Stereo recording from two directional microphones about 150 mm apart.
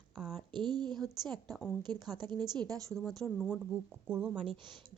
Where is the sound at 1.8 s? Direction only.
30° right (ahead or behind).